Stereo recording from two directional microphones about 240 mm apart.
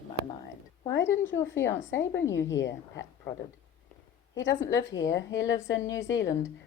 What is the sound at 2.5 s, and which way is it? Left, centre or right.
Speech, left.